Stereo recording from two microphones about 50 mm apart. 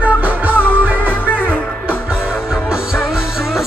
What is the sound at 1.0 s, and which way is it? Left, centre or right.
Music, left.